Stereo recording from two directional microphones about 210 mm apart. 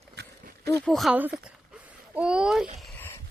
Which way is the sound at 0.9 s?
5° right (ahead or behind).